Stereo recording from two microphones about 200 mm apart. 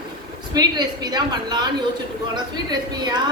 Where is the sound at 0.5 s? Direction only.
20° right (ahead or behind).